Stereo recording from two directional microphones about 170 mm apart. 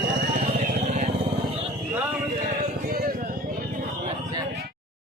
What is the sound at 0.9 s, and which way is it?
Vehicle, 45° right (ahead or behind).